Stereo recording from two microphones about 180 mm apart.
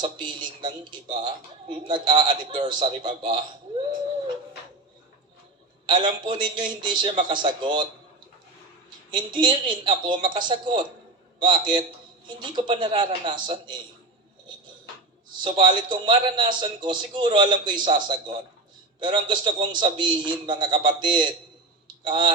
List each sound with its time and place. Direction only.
0.0 s a woman's voice: 25° right (ahead or behind)
5.8 s a woman's voice: 25° right (ahead or behind)
9.0 s a woman's voice: 25° right (ahead or behind)
15.4 s a woman's voice: 25° right (ahead or behind)